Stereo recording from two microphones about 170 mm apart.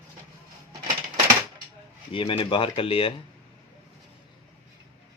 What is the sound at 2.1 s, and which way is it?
Speech, 30° left (ahead or behind).